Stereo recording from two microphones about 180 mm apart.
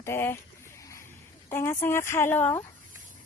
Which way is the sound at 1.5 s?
15° left (ahead or behind).